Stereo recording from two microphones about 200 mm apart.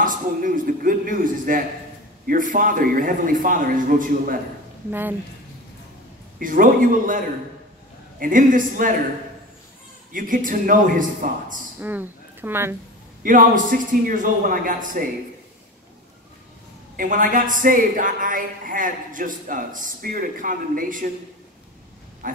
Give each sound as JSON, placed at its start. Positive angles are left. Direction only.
{"t": 0.0, "sound": "a woman's voice", "side_deg": -45}
{"t": 6.4, "sound": "a woman's voice", "side_deg": -45}
{"t": 10.1, "sound": "a woman's voice", "side_deg": -40}
{"t": 11.8, "sound": "a woman's voice", "side_deg": -10}
{"t": 13.2, "sound": "a woman's voice", "side_deg": -40}
{"t": 16.9, "sound": "a woman's voice", "side_deg": -45}
{"t": 22.2, "sound": "pig", "side_deg": -40}